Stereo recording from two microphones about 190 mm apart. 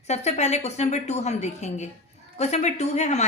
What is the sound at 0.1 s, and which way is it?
Speech, 35° left (ahead or behind).